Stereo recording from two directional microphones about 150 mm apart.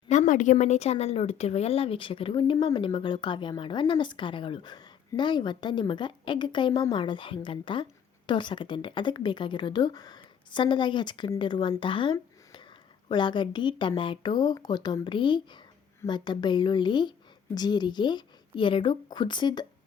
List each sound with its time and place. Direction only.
0.1 s speech: 55° left (ahead or behind); by 12.1 s 35° left (ahead or behind)
12.1 s a sound: 30° left (ahead or behind)
13.1 s speech: 30° left (ahead or behind)